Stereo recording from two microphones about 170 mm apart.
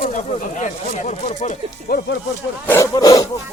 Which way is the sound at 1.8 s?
60° left (ahead or behind).